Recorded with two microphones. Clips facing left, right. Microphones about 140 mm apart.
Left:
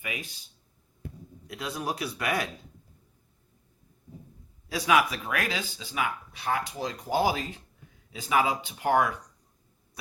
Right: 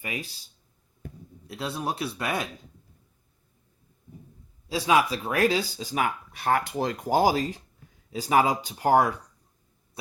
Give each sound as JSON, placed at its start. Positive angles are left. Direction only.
{"t": 0.0, "sound": "speech", "side_deg": -35}
{"t": 1.5, "sound": "speech", "side_deg": -30}
{"t": 4.7, "sound": "speech", "side_deg": -25}
{"t": 7.2, "sound": "speech", "side_deg": -40}